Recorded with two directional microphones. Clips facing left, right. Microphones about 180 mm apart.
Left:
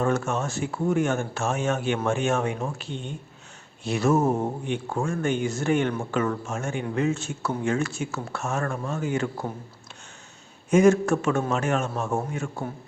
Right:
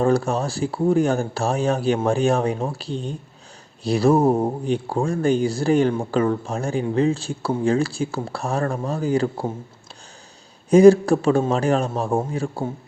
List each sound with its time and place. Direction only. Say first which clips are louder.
0.0 s speech: right 5 dB; 35° right (ahead or behind)
10.7 s speech: right 7 dB; 35° right (ahead or behind)